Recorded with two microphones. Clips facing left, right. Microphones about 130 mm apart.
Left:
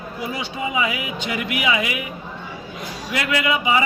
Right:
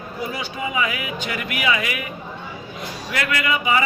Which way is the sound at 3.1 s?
20° left (ahead or behind).